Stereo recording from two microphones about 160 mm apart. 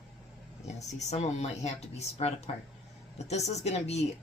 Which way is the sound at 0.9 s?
45° left (ahead or behind).